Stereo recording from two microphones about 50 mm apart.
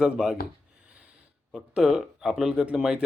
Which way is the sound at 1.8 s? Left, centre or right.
Centre.